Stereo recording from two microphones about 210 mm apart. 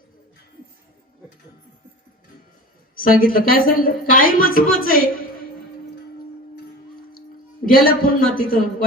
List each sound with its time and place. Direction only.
2.9 s a woman's voice: 40° left (ahead or behind)
7.6 s a woman's voice: 45° left (ahead or behind)